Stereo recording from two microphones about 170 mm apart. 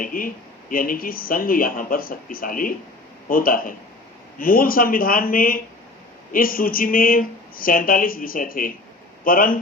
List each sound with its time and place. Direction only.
0.0 s speech: 55° left (ahead or behind)